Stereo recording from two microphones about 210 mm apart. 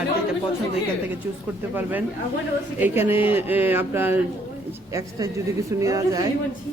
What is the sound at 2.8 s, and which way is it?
Speech, 10° right (ahead or behind).